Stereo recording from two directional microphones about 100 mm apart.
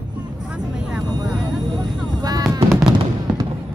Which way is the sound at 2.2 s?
40° right (ahead or behind).